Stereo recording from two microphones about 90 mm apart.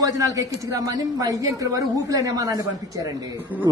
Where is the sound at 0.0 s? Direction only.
40° right (ahead or behind).